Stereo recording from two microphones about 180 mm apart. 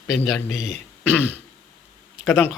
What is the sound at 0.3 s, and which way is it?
Speech, centre (ahead or behind).